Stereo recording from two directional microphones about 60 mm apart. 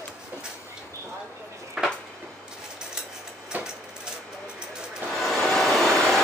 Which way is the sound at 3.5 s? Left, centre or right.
Right.